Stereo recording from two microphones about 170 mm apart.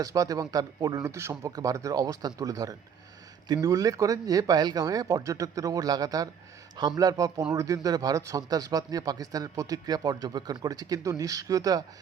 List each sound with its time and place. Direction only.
0.0 s speech: 20° right (ahead or behind)